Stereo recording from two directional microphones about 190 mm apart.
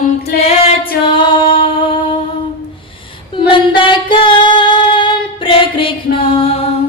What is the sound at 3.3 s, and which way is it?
Female singing, 25° left (ahead or behind).